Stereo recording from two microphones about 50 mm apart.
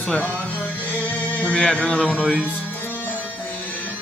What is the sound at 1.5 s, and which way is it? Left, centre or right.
Speech, centre.